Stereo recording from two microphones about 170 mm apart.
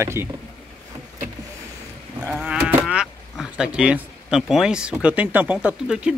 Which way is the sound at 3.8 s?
5° right (ahead or behind).